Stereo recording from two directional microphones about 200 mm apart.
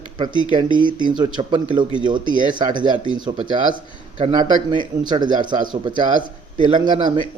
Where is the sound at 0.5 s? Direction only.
25° right (ahead or behind).